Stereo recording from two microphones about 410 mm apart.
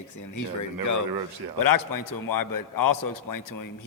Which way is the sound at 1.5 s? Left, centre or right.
Left.